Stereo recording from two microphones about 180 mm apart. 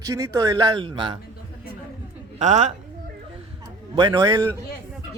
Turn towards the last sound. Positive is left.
turn(degrees=-15)  # may be behind; listen again after turning